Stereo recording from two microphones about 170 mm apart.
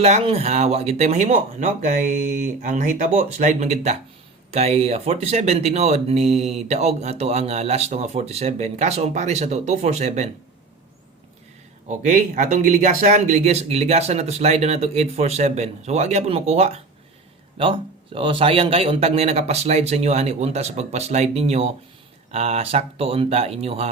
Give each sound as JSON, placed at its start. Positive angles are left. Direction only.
{"t": 0.0, "sound": "speech", "side_deg": -40}
{"t": 11.9, "sound": "speech", "side_deg": -45}